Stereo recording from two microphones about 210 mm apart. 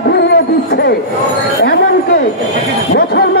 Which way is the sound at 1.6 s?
50° left (ahead or behind).